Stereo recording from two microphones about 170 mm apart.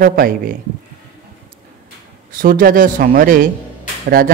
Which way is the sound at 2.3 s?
55° right (ahead or behind).